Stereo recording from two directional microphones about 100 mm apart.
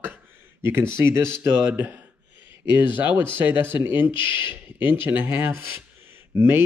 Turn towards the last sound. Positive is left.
turn(degrees=-25)  # may be behind; listen again after turning